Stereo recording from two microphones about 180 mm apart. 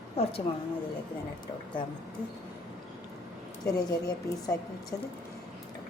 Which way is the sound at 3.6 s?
20° left (ahead or behind).